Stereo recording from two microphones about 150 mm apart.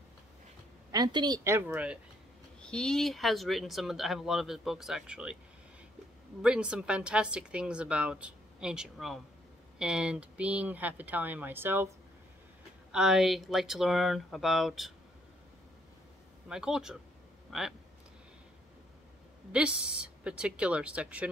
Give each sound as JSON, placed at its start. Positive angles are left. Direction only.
{"t": 0.9, "sound": "a woman's voice", "side_deg": -30}
{"t": 2.6, "sound": "speech", "side_deg": 5}
{"t": 6.4, "sound": "a woman's voice", "side_deg": -5}
{"t": 12.9, "sound": "speech", "side_deg": 0}
{"t": 16.4, "sound": "speech", "side_deg": -5}
{"t": 19.5, "sound": "a woman's voice", "side_deg": -5}